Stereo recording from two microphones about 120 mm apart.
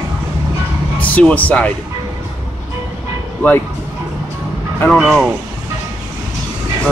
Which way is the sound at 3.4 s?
15° left (ahead or behind).